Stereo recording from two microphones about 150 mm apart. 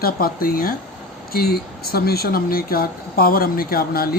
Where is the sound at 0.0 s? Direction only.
75° left (ahead or behind).